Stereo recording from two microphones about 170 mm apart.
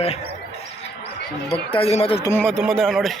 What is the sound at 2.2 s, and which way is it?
Speech, 15° left (ahead or behind).